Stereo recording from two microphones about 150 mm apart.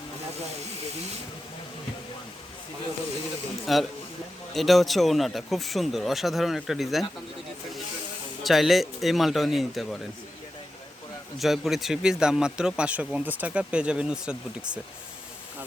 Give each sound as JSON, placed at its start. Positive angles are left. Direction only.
{"t": 3.7, "sound": "speech", "side_deg": 0}
{"t": 8.4, "sound": "speech", "side_deg": 0}
{"t": 11.3, "sound": "speech", "side_deg": 0}